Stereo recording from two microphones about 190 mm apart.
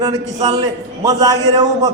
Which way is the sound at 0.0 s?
20° right (ahead or behind).